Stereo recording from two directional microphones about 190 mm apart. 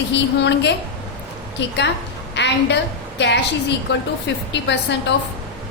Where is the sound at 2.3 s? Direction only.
65° left (ahead or behind).